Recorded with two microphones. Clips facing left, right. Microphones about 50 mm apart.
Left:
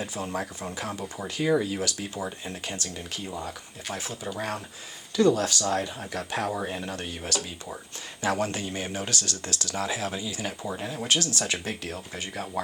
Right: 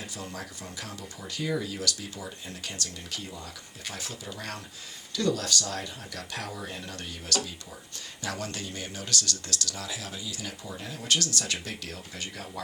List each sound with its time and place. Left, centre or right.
0.0 s speech: left